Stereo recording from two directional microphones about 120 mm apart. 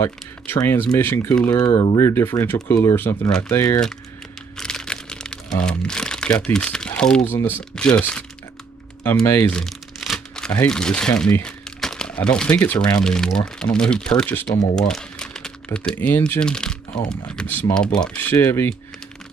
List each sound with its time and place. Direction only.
0.0 s speech: 20° left (ahead or behind)
1.6 s speech: 40° left (ahead or behind)
2.0 s speech: 20° left (ahead or behind)
3.3 s speech: 5° left (ahead or behind)
3.5 s speech: 30° left (ahead or behind)
4.6 s music: 5° left (ahead or behind)
7.3 s speech: 15° left (ahead or behind)
9.2 s speech: 20° left (ahead or behind)
9.5 s speech: centre (ahead or behind)
11.4 s crumpling: 5° left (ahead or behind)
13.0 s speech: 5° left (ahead or behind)
16.3 s speech: 5° left (ahead or behind)